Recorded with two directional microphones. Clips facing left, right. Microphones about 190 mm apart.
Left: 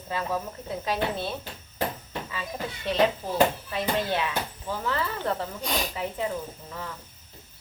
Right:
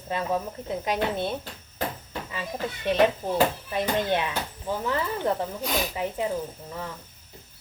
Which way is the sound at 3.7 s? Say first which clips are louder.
Right 2 dB; 20° right (ahead or behind).